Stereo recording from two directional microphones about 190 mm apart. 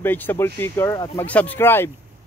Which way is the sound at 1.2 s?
10° left (ahead or behind).